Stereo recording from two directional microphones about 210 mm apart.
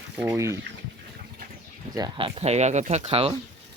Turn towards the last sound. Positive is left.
turn(degrees=-25)  # may be behind; listen again after turning